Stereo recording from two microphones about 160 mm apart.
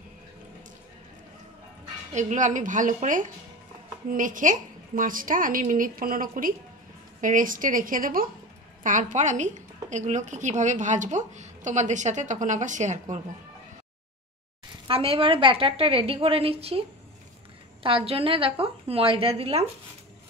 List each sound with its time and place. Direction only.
2.1 s a woman's voice: 50° right (ahead or behind)
14.9 s a woman's voice: 35° right (ahead or behind)
17.8 s a woman's voice: 35° right (ahead or behind)